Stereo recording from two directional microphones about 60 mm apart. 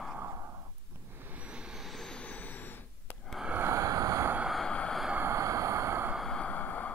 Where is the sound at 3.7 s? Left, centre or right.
Right.